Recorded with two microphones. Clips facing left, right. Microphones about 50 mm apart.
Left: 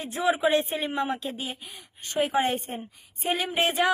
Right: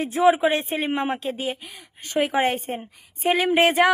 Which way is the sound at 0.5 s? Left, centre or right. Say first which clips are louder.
Right 2 dB; right.